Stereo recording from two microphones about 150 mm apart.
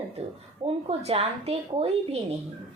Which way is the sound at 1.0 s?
40° right (ahead or behind).